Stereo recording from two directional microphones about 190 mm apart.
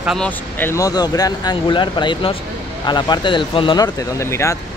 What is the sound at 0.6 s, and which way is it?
Speech, 15° left (ahead or behind).